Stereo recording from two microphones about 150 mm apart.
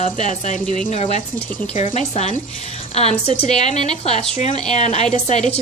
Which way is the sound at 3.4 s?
45° left (ahead or behind).